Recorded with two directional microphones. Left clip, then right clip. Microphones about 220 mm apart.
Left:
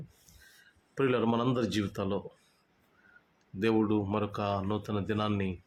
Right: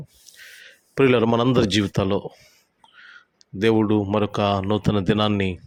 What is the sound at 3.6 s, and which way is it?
Speech, 30° right (ahead or behind).